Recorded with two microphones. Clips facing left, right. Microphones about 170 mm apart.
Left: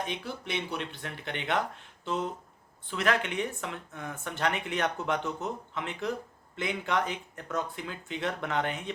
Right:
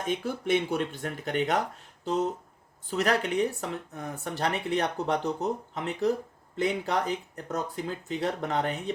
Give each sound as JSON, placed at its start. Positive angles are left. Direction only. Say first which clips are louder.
{"t": 0.0, "sound": "speech", "louder": "right 6 dB", "side_deg": -45}